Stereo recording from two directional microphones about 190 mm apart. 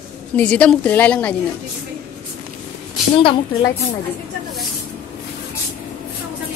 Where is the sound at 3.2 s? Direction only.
25° left (ahead or behind).